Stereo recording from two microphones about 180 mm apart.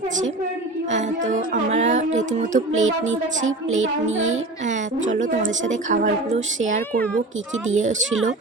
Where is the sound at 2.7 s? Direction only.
90° right.